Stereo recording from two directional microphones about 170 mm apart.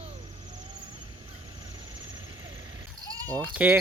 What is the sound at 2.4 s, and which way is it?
Vehicle, 30° right (ahead or behind).